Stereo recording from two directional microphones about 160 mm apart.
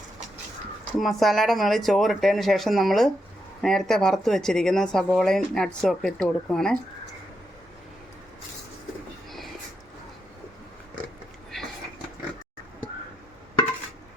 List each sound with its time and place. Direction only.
0.9 s speech: centre (ahead or behind)